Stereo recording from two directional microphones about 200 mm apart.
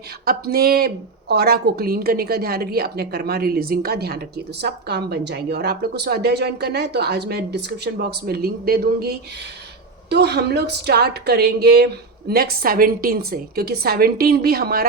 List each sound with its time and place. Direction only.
0.3 s a woman's voice: 50° right (ahead or behind)